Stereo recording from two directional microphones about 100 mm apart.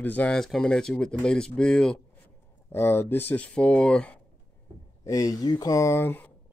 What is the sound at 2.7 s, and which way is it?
Speech, 20° left (ahead or behind).